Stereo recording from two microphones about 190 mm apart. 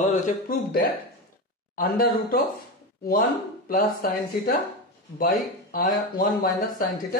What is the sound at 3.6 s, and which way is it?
Speech, 50° left (ahead or behind).